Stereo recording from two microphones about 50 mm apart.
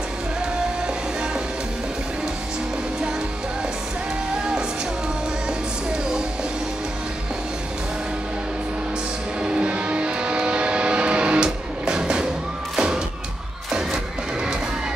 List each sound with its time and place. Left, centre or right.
9.4 s music: centre
12.7 s thump: centre